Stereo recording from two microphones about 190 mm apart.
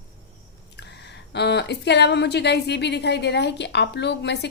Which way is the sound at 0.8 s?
65° left (ahead or behind).